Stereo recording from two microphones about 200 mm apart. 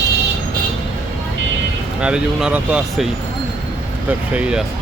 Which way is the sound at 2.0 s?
5° right (ahead or behind).